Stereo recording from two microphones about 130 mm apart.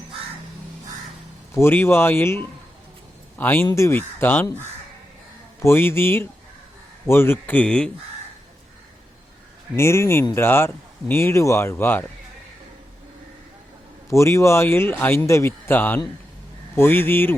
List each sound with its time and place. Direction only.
1.5 s speech: 15° left (ahead or behind)
5.5 s speech: 20° left (ahead or behind)
9.7 s a man's voice: 20° left (ahead or behind)
14.1 s a man's voice: 20° left (ahead or behind)